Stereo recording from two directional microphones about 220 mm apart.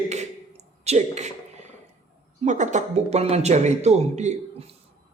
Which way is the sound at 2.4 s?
35° right (ahead or behind).